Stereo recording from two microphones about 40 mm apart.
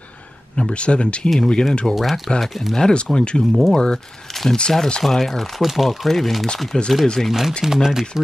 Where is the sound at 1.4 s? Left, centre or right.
Centre.